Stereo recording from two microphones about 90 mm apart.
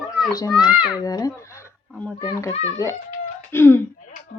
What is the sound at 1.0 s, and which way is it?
Speech, 40° left (ahead or behind).